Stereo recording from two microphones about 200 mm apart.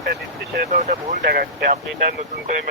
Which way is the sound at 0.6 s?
40° right (ahead or behind).